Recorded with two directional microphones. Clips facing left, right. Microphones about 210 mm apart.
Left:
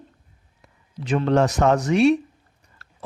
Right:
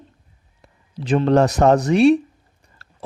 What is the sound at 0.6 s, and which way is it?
A man's voice, 35° right (ahead or behind).